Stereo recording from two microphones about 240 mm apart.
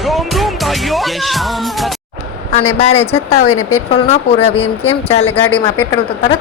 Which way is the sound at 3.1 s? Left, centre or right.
Left.